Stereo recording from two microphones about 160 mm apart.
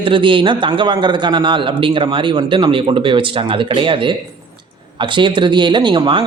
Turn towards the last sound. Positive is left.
turn(degrees=-30)  # may be behind; listen again after turning